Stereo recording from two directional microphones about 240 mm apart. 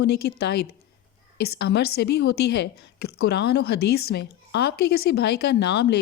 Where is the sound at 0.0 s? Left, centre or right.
Left.